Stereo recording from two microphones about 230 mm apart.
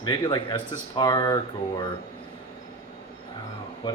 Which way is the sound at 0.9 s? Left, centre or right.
Centre.